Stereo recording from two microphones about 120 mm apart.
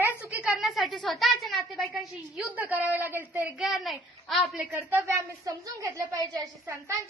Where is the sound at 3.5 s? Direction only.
Centre (ahead or behind).